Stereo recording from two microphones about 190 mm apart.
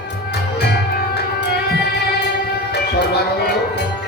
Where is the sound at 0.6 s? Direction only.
60° left (ahead or behind).